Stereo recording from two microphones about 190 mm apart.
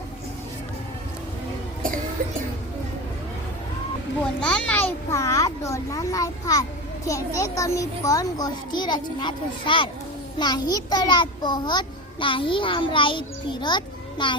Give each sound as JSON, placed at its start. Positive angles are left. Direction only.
{"t": 4.4, "sound": "a child's voice", "side_deg": 5}